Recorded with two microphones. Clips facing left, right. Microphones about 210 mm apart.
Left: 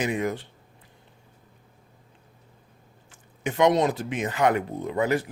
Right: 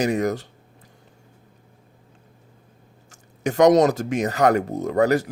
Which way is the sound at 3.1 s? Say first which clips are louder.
Right 5 dB; 40° right (ahead or behind).